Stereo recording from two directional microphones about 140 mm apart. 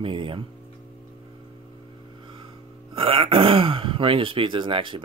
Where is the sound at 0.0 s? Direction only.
40° right (ahead or behind).